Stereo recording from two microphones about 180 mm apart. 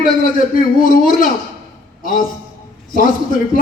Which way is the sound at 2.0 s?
50° left (ahead or behind).